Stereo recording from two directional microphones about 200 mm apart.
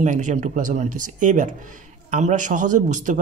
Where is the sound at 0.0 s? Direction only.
40° right (ahead or behind).